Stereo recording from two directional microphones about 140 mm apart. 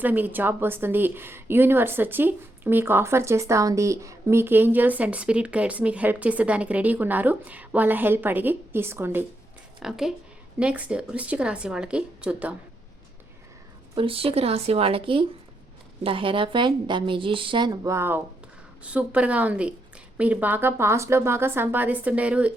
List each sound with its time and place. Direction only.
0.0 s a woman's voice: 15° right (ahead or behind)
9.8 s a woman's voice: 5° right (ahead or behind)
13.9 s a woman's voice: 40° right (ahead or behind); by 22.5 s 10° right (ahead or behind)